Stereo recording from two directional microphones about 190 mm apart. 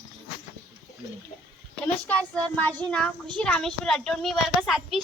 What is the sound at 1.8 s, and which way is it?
Speech, 5° left (ahead or behind).